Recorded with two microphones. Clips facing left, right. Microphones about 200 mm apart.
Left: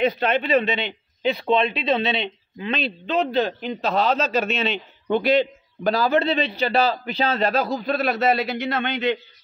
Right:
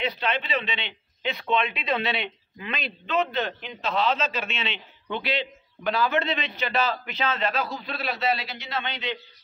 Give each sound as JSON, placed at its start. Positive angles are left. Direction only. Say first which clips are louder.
{"t": 0.0, "sound": "a man's voice", "louder": "left 7 dB", "side_deg": 50}